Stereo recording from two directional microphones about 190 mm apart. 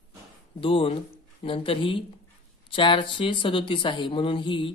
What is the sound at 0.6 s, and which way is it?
Speech, 30° left (ahead or behind).